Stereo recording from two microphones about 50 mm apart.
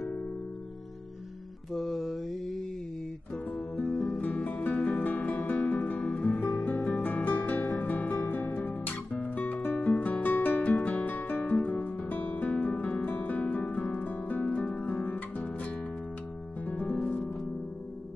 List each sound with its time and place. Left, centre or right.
1.7 s mantra: centre
3.8 s music: centre
4.1 s music: left